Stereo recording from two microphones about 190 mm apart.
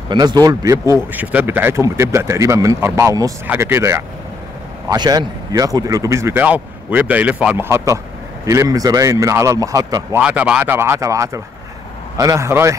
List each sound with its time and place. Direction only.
0.1 s speech: 20° right (ahead or behind)
10.1 s speech: 5° right (ahead or behind)